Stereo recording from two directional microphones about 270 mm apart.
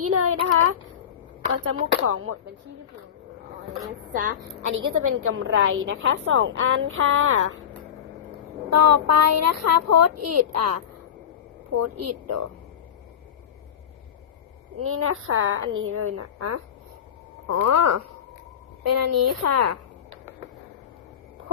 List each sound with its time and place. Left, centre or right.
0.1 s a woman's voice: right
4.1 s a woman's voice: right
4.6 s a woman's voice: right
8.7 s speech: right
14.8 s a woman's voice: right